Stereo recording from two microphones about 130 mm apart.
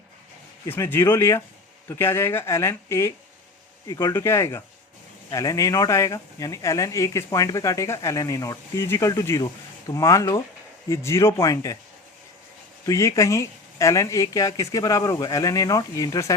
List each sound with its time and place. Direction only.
0.7 s speech: 15° left (ahead or behind)
4.1 s speech: 20° left (ahead or behind)
12.8 s speech: 25° left (ahead or behind)